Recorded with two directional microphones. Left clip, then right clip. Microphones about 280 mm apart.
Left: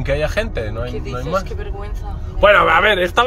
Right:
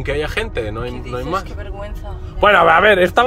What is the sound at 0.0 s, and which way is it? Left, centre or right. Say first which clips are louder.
Speech: left 1 dB; centre.